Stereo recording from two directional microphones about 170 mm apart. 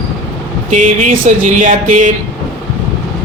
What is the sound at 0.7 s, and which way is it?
Speech, 45° right (ahead or behind).